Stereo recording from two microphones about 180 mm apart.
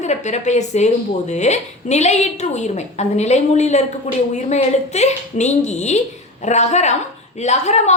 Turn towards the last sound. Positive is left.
turn(degrees=40)  # may be behind; listen again after turning